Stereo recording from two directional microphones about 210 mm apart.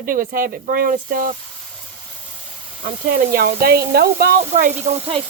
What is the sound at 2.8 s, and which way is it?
Speech, 45° right (ahead or behind).